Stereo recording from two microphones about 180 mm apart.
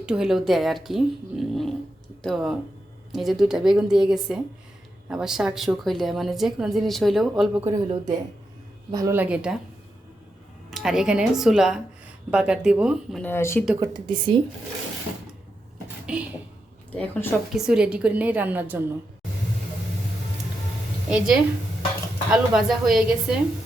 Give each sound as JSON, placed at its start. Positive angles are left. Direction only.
{"t": 0.0, "sound": "a woman's voice", "side_deg": -5}
{"t": 7.9, "sound": "a woman's voice", "side_deg": -25}
{"t": 10.7, "sound": "a woman's voice", "side_deg": 0}
{"t": 13.2, "sound": "speech", "side_deg": 15}
{"t": 13.7, "sound": "a woman's voice", "side_deg": -20}
{"t": 16.1, "sound": "a woman's voice", "side_deg": -5}
{"t": 16.9, "sound": "speech", "side_deg": 10}
{"t": 17.5, "sound": "a woman's voice", "side_deg": -5}
{"t": 21.1, "sound": "a woman's voice", "side_deg": -5}